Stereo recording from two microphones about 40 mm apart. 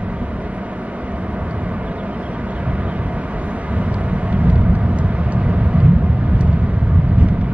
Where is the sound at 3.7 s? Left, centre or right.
Right.